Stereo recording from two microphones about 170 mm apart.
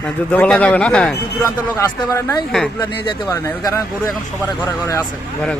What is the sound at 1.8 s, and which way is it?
Speech, 20° left (ahead or behind).